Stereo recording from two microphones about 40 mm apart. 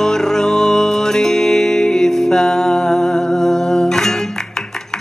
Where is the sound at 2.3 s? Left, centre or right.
Centre.